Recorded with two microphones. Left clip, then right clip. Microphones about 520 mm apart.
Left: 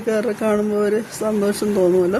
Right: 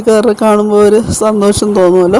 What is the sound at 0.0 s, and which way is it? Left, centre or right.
Speech, left.